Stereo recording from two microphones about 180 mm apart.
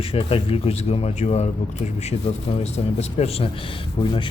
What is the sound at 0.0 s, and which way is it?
Speech, 30° left (ahead or behind).